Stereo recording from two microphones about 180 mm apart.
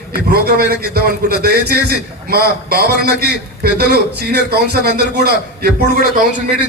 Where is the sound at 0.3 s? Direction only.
60° right (ahead or behind).